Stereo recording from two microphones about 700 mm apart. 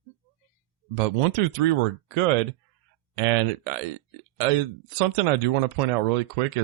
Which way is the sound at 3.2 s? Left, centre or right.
Right.